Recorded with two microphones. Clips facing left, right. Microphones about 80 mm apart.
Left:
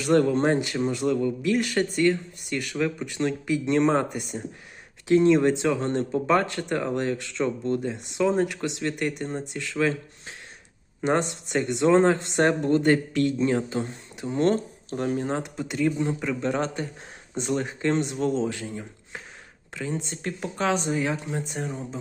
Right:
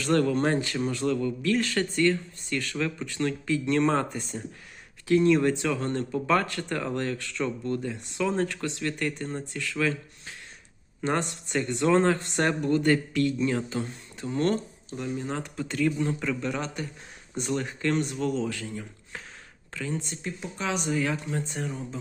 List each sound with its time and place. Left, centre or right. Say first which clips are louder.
0.0 s a man's voice: left 3 dB; left
5.0 s a man's voice: left 3 dB; left
14.5 s speech: left 4 dB; left
15.3 s speech: left 4 dB; left
15.6 s a man's voice: left 1 dB; centre
16.4 s speech: left 5 dB; left
17.3 s a man's voice: left 3 dB; left
20.2 s speech: left 8 dB; left
20.7 s a man's voice: left 2 dB; left